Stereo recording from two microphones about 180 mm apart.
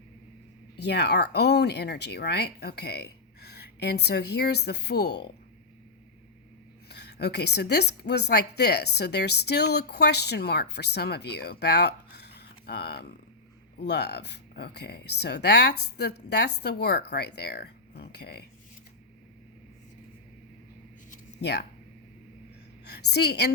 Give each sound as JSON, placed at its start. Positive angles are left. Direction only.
{"t": 0.8, "sound": "a woman's voice", "side_deg": 70}
{"t": 6.8, "sound": "a woman's voice", "side_deg": 65}
{"t": 11.6, "sound": "a sound", "side_deg": 65}
{"t": 13.7, "sound": "a woman's voice", "side_deg": 65}
{"t": 21.4, "sound": "speech", "side_deg": 65}
{"t": 22.9, "sound": "a woman's voice", "side_deg": 65}